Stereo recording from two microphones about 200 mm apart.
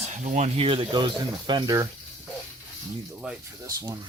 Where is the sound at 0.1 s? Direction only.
35° right (ahead or behind); by 1.9 s 20° right (ahead or behind).